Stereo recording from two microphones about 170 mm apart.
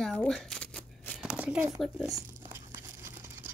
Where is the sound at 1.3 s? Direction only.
5° right (ahead or behind).